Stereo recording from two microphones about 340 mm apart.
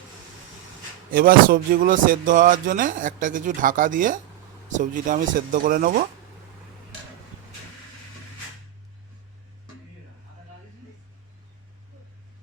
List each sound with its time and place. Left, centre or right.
1.1 s speech: right